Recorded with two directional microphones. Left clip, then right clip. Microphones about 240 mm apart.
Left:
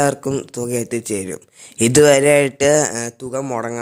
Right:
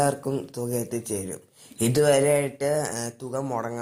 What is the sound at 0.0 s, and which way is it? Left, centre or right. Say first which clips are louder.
Speech: left 6 dB; left.